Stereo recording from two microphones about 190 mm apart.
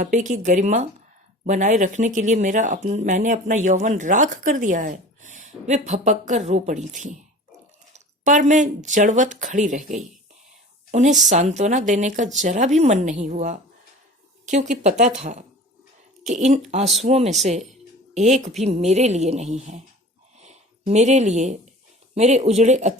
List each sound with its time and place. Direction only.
0.0 s speech: 40° right (ahead or behind)
20.4 s a sound: 35° right (ahead or behind)
22.1 s speech: 35° right (ahead or behind)